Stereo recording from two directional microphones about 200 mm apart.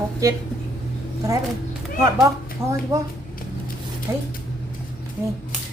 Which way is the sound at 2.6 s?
15° right (ahead or behind).